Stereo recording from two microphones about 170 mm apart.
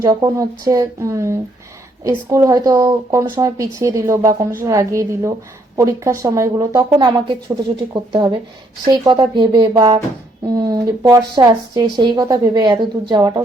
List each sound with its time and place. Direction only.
0.0 s a woman's voice: 20° right (ahead or behind)